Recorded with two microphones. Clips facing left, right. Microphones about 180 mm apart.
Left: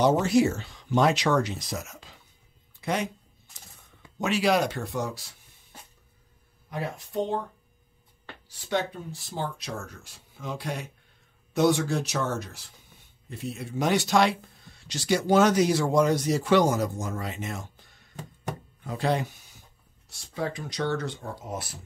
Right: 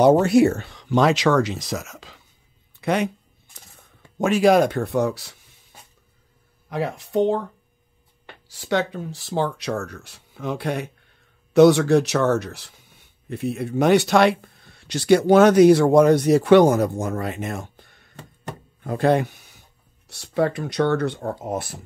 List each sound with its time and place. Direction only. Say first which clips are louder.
0.0 s speech: right 7 dB; 55° right (ahead or behind); by 2.1 s 90° right
2.8 s speech: right 7 dB; 65° right (ahead or behind)
4.2 s speech: right 8 dB; 50° right (ahead or behind); by 5.3 s 65° right (ahead or behind)
6.7 s speech: right 8 dB; 80° right
8.5 s speech: right 5 dB; 90° right; by 10.9 s 65° right (ahead or behind)
11.5 s speech: right 10 dB; 75° right (ahead or behind)
13.3 s speech: right 9 dB; 60° right (ahead or behind)